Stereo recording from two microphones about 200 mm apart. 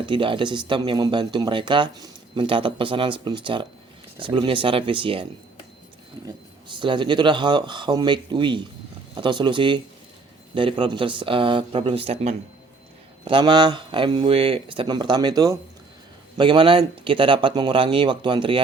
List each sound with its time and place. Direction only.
0.0 s speech: 25° right (ahead or behind)